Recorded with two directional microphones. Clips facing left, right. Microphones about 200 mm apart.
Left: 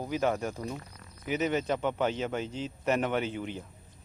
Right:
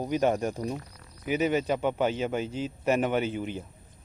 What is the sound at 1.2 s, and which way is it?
A man's voice, 10° right (ahead or behind).